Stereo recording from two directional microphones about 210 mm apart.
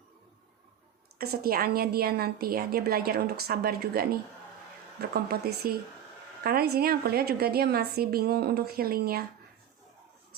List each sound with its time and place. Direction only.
1.2 s a woman's voice: 45° right (ahead or behind)